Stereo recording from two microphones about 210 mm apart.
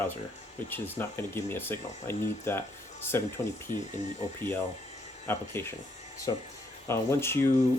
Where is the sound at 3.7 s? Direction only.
35° left (ahead or behind).